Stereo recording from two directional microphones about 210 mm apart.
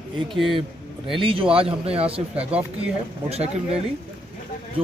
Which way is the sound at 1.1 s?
25° right (ahead or behind).